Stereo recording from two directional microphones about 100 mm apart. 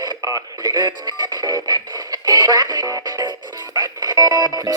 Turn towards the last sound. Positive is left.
turn(degrees=-40)  # may be behind; listen again after turning